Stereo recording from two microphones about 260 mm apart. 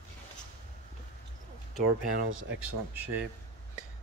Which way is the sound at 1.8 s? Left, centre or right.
Right.